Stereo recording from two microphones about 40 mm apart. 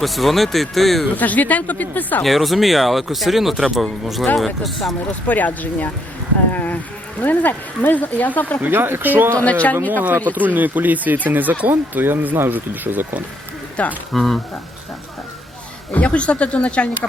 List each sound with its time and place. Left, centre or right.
0.0 s speech: centre
1.1 s speech: left
2.2 s speech: centre
5.2 s speech: left
6.5 s a sound: left
7.2 s speech: left
8.6 s speech: right
9.3 s speech: left
9.9 s speech: right
14.1 s speech: centre
15.9 s speech: left